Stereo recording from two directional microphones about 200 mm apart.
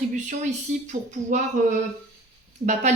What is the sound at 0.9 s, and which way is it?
Speech, 35° right (ahead or behind).